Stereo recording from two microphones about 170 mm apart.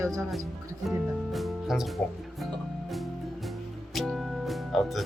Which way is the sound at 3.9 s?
Centre (ahead or behind).